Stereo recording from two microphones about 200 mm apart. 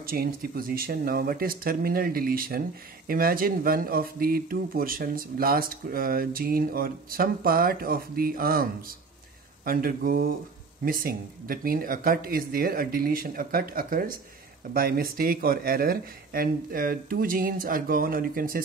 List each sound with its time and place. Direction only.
0.0 s speech: 45° right (ahead or behind)